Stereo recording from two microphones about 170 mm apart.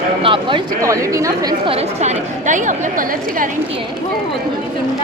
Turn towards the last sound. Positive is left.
turn(degrees=-55)  # may be behind; listen again after turning